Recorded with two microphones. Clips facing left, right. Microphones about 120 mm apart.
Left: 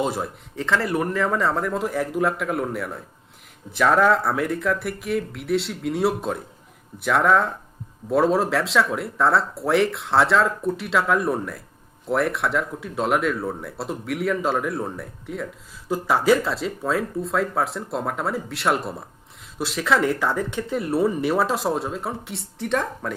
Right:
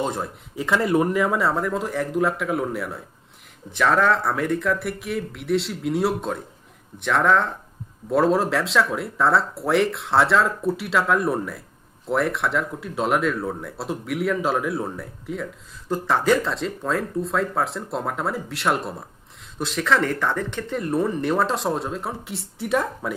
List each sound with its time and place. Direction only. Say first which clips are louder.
0.0 s speech: left 1 dB; 5° left (ahead or behind)
0.5 s speech: right 3 dB; 10° right (ahead or behind)